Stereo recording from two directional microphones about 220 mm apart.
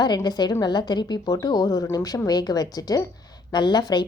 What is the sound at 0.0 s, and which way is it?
A woman's voice, 20° left (ahead or behind).